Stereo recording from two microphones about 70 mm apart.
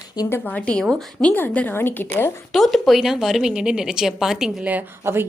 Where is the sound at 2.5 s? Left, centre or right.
Centre.